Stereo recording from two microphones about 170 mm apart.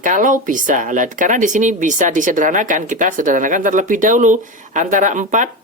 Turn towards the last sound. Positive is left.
turn(degrees=-45)  # may be behind; listen again after turning